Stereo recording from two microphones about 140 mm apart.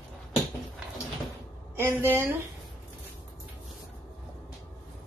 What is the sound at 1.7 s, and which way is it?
Speech, 20° right (ahead or behind).